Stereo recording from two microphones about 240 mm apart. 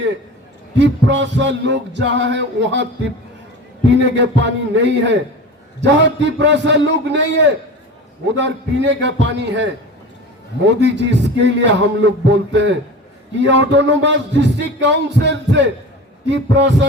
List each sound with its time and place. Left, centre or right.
0.8 s music: right
3.8 s music: right